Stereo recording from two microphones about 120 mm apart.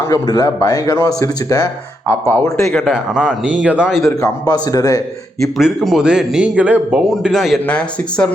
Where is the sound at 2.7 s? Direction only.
Centre (ahead or behind).